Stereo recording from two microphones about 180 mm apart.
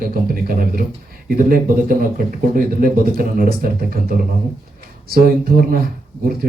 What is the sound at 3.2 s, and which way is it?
Speech, 50° right (ahead or behind).